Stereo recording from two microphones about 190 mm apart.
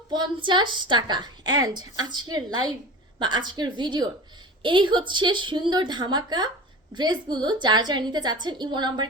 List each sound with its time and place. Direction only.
0.1 s a woman's voice: 25° right (ahead or behind)